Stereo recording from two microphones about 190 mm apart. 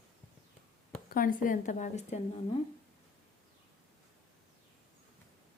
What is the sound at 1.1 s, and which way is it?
A woman's voice, 45° left (ahead or behind).